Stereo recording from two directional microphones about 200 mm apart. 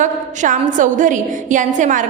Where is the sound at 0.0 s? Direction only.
40° right (ahead or behind).